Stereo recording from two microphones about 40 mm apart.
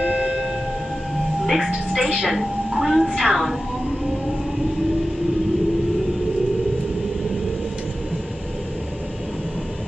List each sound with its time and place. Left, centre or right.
0.0 s train: centre
1.4 s music: centre
2.0 s a woman's voice: centre